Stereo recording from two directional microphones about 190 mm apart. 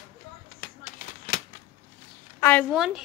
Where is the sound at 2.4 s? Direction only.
10° left (ahead or behind).